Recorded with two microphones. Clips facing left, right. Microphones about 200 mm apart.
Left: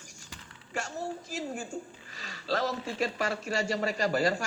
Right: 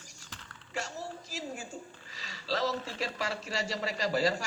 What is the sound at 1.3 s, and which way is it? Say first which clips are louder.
A man's voice: left 4 dB; 50° left (ahead or behind).